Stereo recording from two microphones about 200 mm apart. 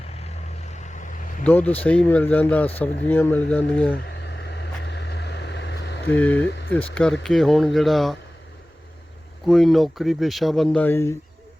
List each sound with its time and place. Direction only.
0.3 s vehicle: 35° left (ahead or behind)
1.5 s speech: 10° left (ahead or behind)
3.9 s vehicle: 55° left (ahead or behind)
6.1 s speech: 10° left (ahead or behind)
6.5 s speech: 60° left (ahead or behind)
6.9 s speech: 5° left (ahead or behind)
9.5 s speech: centre (ahead or behind)